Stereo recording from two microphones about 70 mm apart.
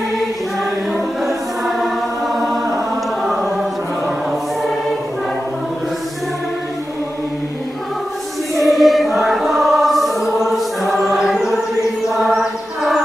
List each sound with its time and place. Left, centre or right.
1.2 s choir: centre
2.7 s chant: centre
8.5 s choir: centre
12.2 s music: centre